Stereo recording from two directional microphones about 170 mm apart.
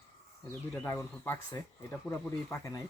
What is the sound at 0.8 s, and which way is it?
Speech, 15° left (ahead or behind).